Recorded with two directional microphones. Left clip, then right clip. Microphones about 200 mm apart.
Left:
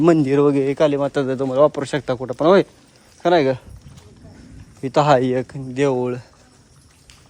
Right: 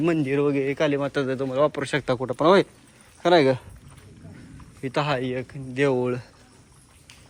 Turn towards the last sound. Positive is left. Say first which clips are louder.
# left 3 dB
turn(degrees=10)  # may be behind; listen again after turning